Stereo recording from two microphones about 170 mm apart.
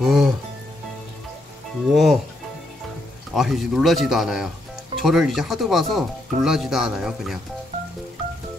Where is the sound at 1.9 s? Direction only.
Centre (ahead or behind).